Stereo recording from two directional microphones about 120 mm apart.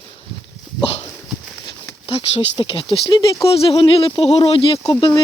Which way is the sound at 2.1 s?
55° left (ahead or behind).